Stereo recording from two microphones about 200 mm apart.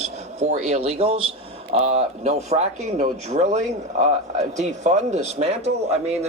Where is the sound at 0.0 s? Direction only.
35° right (ahead or behind).